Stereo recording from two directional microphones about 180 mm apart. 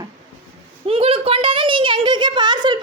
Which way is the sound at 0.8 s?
30° right (ahead or behind).